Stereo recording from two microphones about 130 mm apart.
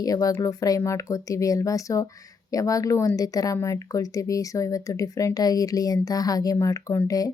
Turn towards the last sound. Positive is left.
turn(degrees=25)  # may be behind; listen again after turning